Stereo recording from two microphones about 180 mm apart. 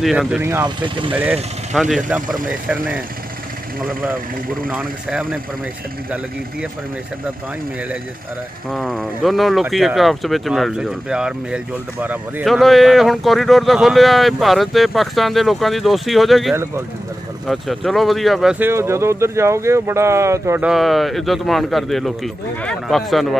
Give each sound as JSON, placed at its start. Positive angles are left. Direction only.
{"t": 0.0, "sound": "speech", "side_deg": 0}
{"t": 0.4, "sound": "speech", "side_deg": -15}
{"t": 0.7, "sound": "speech", "side_deg": -30}
{"t": 1.1, "sound": "speech", "side_deg": -5}
{"t": 2.2, "sound": "speech", "side_deg": -50}
{"t": 3.8, "sound": "speech", "side_deg": -10}
{"t": 8.6, "sound": "speech", "side_deg": 5}
{"t": 20.7, "sound": "speech", "side_deg": 0}